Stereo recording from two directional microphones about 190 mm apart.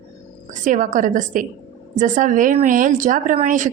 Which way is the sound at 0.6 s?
45° right (ahead or behind).